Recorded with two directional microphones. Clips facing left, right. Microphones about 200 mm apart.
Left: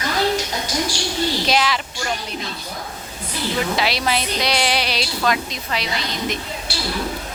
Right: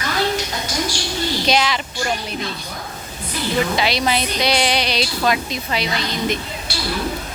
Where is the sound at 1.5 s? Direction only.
Centre (ahead or behind).